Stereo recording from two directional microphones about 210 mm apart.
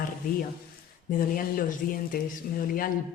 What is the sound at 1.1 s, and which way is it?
Speech, 40° left (ahead or behind).